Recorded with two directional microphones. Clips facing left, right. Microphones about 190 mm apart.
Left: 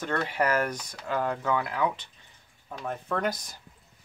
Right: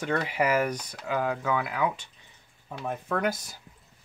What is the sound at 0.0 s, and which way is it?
Speech, 10° right (ahead or behind).